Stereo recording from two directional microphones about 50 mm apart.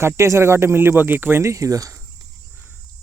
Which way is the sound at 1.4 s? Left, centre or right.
Right.